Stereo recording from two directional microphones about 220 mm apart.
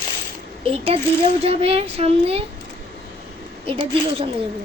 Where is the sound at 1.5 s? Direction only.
25° right (ahead or behind).